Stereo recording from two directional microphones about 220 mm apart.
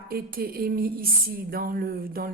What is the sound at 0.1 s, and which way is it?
A woman's voice, 45° right (ahead or behind).